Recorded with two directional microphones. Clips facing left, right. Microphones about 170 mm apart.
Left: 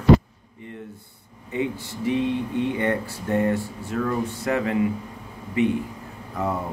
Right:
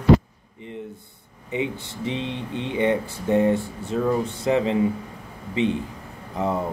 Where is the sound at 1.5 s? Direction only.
20° right (ahead or behind).